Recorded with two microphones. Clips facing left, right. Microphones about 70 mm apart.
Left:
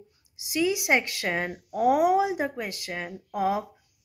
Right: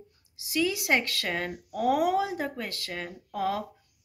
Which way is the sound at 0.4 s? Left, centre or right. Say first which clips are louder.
Left 2 dB; centre.